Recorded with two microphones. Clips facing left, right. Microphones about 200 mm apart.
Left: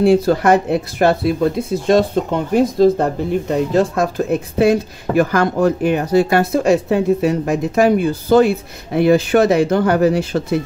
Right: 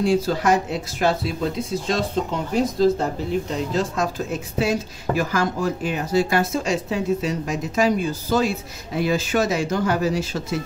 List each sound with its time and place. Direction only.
0.0 s speech: 60° left (ahead or behind)